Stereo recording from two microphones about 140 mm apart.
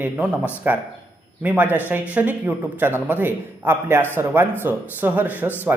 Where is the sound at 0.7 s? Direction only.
10° right (ahead or behind).